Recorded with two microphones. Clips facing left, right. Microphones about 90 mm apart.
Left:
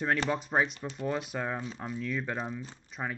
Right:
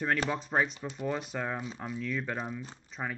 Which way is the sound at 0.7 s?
15° right (ahead or behind).